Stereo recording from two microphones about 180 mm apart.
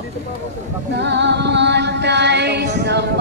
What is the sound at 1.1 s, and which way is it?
Music, 75° right (ahead or behind).